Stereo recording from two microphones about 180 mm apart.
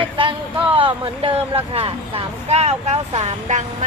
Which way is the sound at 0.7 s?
30° right (ahead or behind).